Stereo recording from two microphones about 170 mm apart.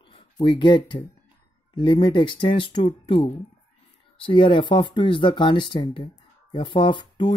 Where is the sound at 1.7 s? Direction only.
30° left (ahead or behind).